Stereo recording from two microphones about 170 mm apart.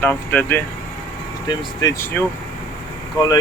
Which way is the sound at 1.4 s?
25° left (ahead or behind).